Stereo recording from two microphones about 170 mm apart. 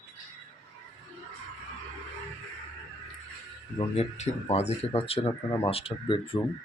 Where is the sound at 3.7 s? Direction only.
40° left (ahead or behind).